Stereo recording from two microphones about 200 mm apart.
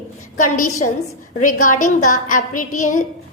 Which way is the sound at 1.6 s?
40° left (ahead or behind).